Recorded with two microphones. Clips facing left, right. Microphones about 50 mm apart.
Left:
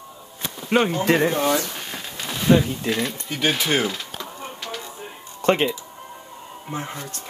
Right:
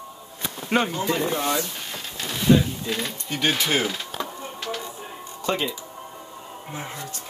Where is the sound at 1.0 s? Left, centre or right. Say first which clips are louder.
Left 5 dB; left.